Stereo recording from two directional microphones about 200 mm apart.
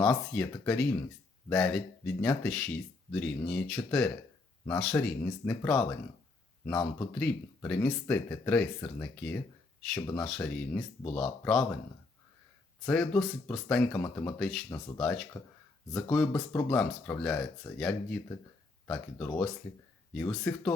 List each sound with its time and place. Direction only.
0.0 s speech: 5° left (ahead or behind)
12.8 s speech: 5° left (ahead or behind)